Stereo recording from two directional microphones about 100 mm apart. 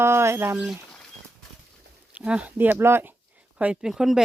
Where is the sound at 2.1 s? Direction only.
10° right (ahead or behind).